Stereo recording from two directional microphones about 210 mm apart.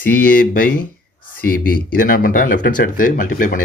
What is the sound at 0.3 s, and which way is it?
Speech, 40° left (ahead or behind).